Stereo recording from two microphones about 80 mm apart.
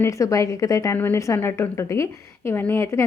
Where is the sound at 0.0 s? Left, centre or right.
Left.